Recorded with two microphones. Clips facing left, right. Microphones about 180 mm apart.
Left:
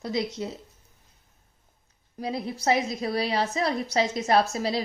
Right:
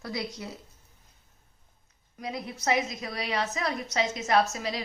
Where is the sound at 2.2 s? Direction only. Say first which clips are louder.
Left 4 dB; 30° left (ahead or behind).